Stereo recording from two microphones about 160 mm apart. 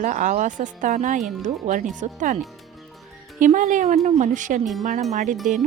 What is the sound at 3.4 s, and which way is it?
A woman's voice, 55° right (ahead or behind).